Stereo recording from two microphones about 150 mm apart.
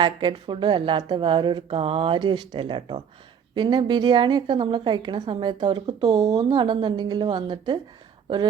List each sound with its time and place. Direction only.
0.0 s a woman's voice: 30° right (ahead or behind)